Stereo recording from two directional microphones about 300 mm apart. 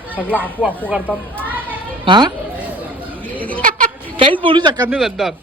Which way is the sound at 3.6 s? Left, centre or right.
Right.